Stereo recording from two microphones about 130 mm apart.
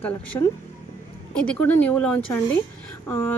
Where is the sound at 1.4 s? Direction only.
10° left (ahead or behind).